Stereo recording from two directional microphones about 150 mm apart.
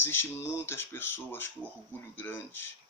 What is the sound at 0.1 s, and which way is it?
Speech, 15° left (ahead or behind).